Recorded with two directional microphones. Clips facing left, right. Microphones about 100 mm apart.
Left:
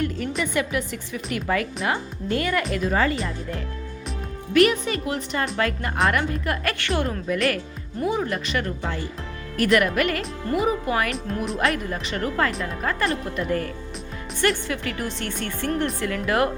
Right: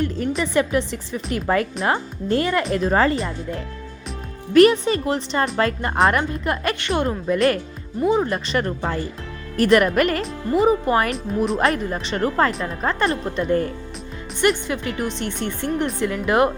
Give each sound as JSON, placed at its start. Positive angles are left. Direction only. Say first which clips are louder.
{"t": 0.0, "sound": "speech", "louder": "right 3 dB", "side_deg": -35}
{"t": 4.5, "sound": "a woman's voice", "louder": "right 5 dB", "side_deg": -30}